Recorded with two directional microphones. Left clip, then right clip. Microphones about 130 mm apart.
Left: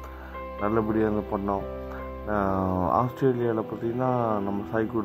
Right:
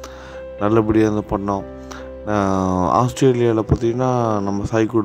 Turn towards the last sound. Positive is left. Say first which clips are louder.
# right 9 dB
turn(degrees=-50)  # may be behind; listen again after turning